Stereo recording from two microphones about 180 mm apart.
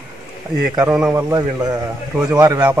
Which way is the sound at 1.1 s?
20° right (ahead or behind).